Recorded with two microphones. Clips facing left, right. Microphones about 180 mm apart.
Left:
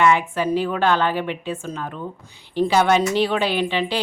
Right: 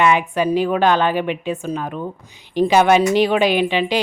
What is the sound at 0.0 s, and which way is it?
A woman's voice, 15° right (ahead or behind).